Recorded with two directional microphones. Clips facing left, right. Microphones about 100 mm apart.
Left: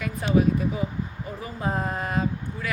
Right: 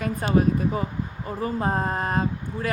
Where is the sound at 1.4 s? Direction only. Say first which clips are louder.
Right 4 dB; 40° right (ahead or behind).